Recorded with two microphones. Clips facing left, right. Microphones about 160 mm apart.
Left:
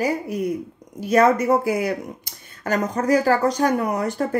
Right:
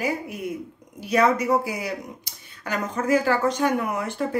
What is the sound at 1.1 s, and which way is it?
A woman's voice, 50° left (ahead or behind).